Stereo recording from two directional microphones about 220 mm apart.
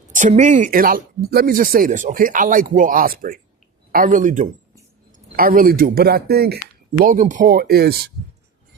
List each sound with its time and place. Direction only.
0.1 s speech: 35° right (ahead or behind)